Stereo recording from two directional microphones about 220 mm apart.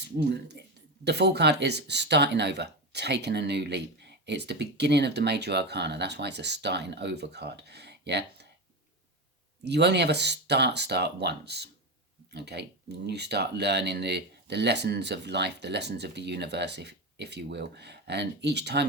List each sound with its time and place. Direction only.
0.0 s speech: 50° right (ahead or behind)
9.6 s speech: 50° right (ahead or behind)